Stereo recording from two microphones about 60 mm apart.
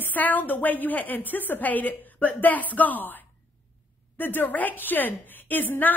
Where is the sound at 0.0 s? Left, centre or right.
Left.